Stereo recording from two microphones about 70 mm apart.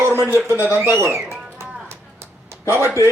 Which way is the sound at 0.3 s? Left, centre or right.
Right.